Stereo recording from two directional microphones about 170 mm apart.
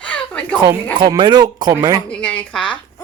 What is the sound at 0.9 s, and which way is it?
Speech, 25° right (ahead or behind).